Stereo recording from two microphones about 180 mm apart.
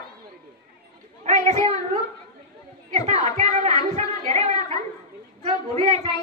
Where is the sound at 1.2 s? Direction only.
40° right (ahead or behind).